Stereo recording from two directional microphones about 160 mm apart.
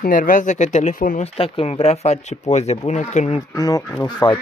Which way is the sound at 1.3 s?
35° left (ahead or behind).